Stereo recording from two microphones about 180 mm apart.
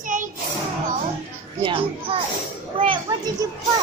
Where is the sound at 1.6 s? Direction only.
30° right (ahead or behind).